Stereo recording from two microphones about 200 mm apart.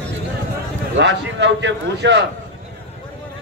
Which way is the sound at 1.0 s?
60° right (ahead or behind).